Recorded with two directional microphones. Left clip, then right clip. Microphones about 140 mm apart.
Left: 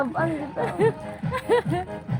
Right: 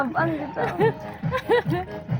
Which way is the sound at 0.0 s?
30° right (ahead or behind).